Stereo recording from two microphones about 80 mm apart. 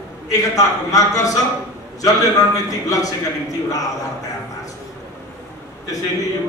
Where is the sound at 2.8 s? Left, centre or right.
Left.